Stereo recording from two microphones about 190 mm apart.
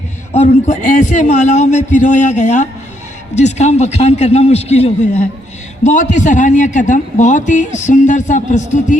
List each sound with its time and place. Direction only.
0.3 s a man's voice: 40° left (ahead or behind)